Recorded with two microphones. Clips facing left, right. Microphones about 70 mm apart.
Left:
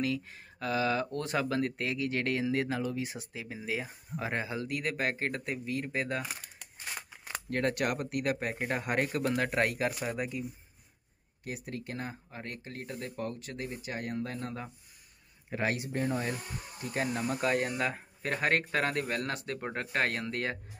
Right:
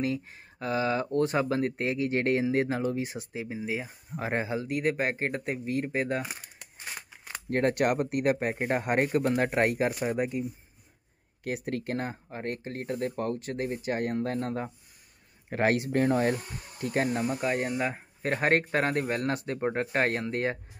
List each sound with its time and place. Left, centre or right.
0.0 s speech: right
3.5 s speech: centre
4.2 s speech: right
6.2 s crumpling: centre
7.4 s speech: right
11.4 s speech: right
12.1 s speech: right
15.5 s speech: right
17.3 s speech: centre
18.2 s speech: right